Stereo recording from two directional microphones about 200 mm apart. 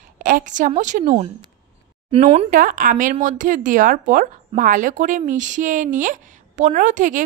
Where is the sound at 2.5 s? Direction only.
45° right (ahead or behind).